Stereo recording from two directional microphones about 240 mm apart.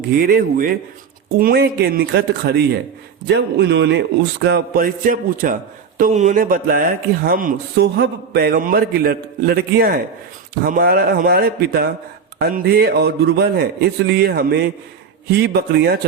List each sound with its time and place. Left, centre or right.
0.0 s a man's voice: right